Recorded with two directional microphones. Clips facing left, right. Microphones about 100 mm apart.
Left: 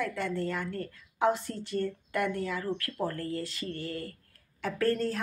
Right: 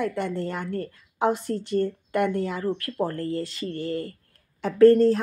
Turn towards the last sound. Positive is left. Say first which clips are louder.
# right 13 dB
turn(degrees=-25)  # may be behind; listen again after turning